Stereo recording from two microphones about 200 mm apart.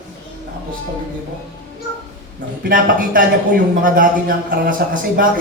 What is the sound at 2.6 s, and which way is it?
A man's voice, 45° right (ahead or behind).